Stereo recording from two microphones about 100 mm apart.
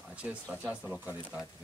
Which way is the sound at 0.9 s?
20° right (ahead or behind).